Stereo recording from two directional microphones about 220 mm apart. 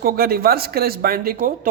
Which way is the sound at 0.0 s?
45° right (ahead or behind).